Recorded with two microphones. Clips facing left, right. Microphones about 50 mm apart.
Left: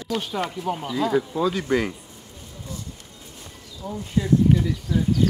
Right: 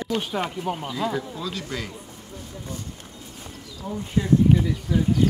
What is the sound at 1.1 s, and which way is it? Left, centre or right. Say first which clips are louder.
Speech: left 8 dB; left.